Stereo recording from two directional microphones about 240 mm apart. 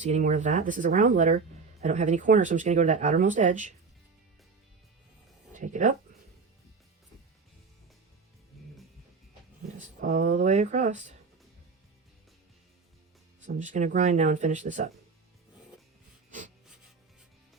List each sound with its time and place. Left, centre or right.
0.0 s speech: right
5.5 s speech: right
9.8 s speech: right
13.4 s speech: right